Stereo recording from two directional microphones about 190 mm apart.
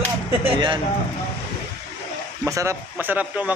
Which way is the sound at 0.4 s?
25° right (ahead or behind).